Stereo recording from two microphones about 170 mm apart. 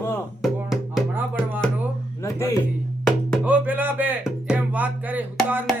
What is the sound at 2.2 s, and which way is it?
Speech, 15° left (ahead or behind).